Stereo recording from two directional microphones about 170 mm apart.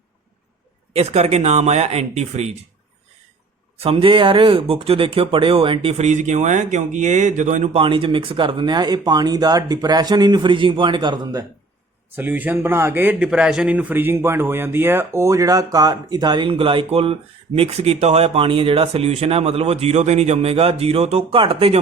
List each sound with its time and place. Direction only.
0.9 s speech: 40° right (ahead or behind)
3.8 s speech: 35° right (ahead or behind)
7.8 s a man's voice: 30° right (ahead or behind)
12.1 s a man's voice: 10° right (ahead or behind); by 21.8 s 30° right (ahead or behind)